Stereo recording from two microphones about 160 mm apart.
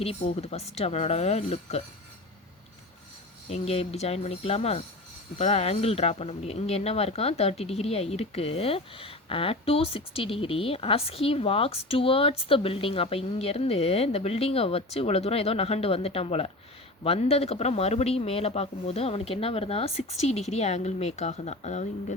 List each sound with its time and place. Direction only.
0.0 s speech: 40° left (ahead or behind)
3.5 s speech: 40° left (ahead or behind)